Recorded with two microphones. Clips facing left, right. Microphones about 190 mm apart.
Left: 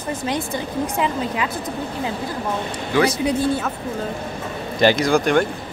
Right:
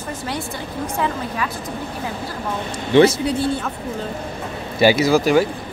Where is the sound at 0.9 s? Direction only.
20° left (ahead or behind).